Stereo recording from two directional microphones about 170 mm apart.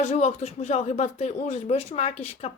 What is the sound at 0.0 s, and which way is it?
A woman's voice, 40° left (ahead or behind).